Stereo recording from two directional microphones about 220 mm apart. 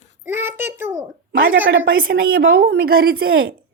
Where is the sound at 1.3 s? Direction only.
45° right (ahead or behind).